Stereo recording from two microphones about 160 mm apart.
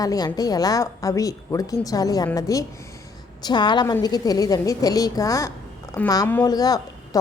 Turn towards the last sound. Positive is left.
turn(degrees=25)  # may be behind; listen again after turning